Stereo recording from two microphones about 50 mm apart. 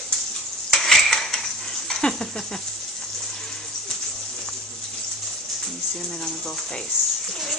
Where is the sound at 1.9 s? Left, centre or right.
Centre.